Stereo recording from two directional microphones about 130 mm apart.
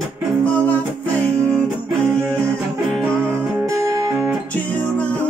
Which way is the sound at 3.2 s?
25° right (ahead or behind).